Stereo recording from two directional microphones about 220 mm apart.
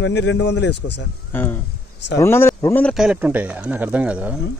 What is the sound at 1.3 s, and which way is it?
Speech, 10° left (ahead or behind).